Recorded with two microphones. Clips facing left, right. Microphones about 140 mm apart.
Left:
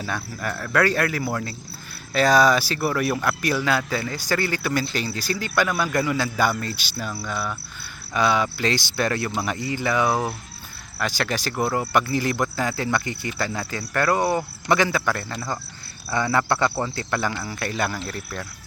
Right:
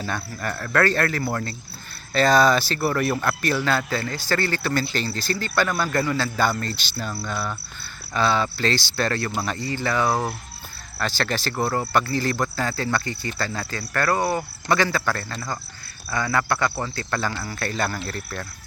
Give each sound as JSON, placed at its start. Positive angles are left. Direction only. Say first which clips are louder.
{"t": 0.0, "sound": "speech", "louder": "even", "side_deg": 5}
{"t": 8.1, "sound": "speech", "louder": "left 1 dB", "side_deg": 15}